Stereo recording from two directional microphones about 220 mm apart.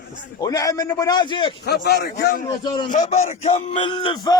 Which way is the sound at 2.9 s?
30° left (ahead or behind).